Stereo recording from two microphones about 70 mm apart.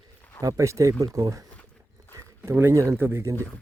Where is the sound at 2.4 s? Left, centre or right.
Right.